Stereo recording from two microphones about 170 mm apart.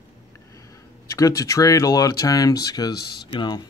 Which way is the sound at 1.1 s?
20° left (ahead or behind).